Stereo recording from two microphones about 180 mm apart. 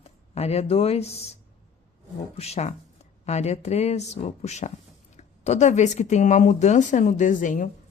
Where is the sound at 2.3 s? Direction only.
35° left (ahead or behind).